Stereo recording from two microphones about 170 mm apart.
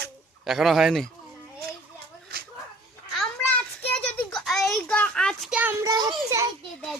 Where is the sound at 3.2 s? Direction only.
10° left (ahead or behind); by 6.5 s 20° right (ahead or behind).